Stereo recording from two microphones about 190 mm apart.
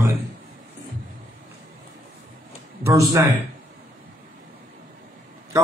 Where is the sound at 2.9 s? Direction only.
15° right (ahead or behind).